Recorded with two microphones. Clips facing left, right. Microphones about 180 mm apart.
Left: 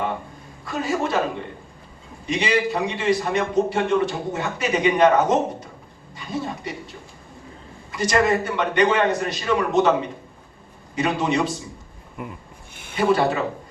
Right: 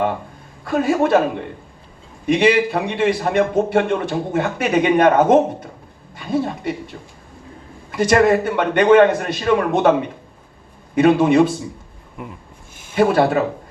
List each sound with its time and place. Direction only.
0.6 s a man's voice: 55° right (ahead or behind)
2.2 s a man's voice: 55° right (ahead or behind)
10.9 s a man's voice: 55° right (ahead or behind)
12.1 s speech: centre (ahead or behind)
12.7 s a sound: 60° left (ahead or behind)
13.0 s a man's voice: 60° right (ahead or behind)